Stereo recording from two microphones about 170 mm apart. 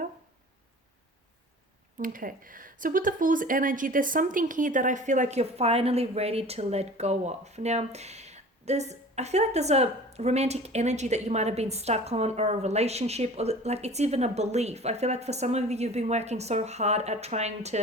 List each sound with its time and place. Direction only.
2.0 s speech: 55° right (ahead or behind)